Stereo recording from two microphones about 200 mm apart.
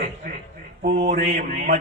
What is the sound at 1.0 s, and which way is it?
Speech, 40° right (ahead or behind).